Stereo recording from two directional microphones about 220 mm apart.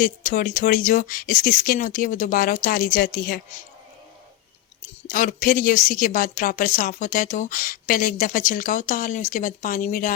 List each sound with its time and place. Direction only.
0.0 s speech: 35° left (ahead or behind)
5.0 s speech: 40° left (ahead or behind)